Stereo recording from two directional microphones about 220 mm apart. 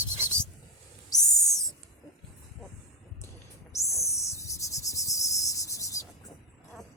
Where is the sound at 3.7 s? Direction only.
15° left (ahead or behind).